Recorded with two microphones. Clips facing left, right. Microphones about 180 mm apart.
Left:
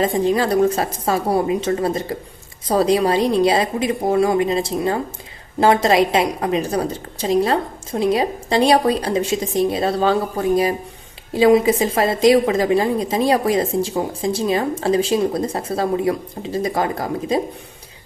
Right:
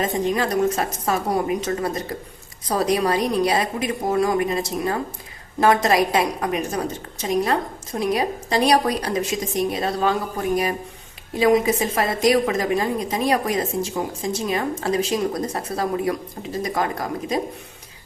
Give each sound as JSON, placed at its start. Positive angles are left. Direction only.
{"t": 0.0, "sound": "a woman's voice", "side_deg": 30}